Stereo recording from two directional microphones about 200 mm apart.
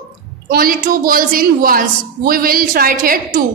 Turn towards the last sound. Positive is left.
turn(degrees=-45)  # may be behind; listen again after turning